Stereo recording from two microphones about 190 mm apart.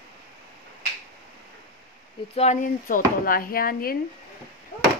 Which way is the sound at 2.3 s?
35° left (ahead or behind).